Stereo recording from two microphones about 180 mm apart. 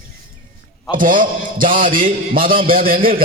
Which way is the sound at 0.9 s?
45° right (ahead or behind).